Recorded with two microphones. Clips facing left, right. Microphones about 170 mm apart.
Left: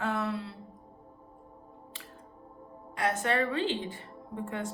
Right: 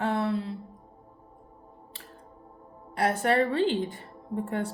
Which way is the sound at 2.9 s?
35° right (ahead or behind).